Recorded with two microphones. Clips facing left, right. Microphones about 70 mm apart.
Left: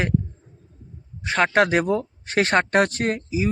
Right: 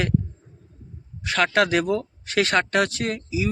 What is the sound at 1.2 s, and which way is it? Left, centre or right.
Speech, left.